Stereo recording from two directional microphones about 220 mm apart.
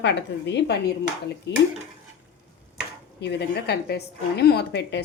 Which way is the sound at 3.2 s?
50° left (ahead or behind).